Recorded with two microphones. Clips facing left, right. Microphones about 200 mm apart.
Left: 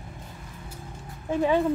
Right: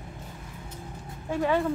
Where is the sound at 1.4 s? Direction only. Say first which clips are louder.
Left 3 dB; 15° left (ahead or behind).